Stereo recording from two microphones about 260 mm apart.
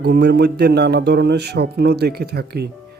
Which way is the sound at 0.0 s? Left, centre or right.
Right.